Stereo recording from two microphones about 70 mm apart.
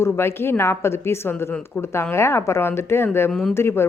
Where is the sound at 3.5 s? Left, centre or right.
Left.